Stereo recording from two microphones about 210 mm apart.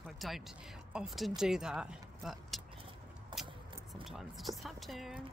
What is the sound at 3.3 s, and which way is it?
Vehicle, 20° right (ahead or behind).